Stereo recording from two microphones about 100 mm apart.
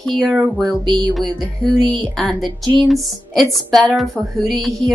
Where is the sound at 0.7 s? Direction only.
45° right (ahead or behind).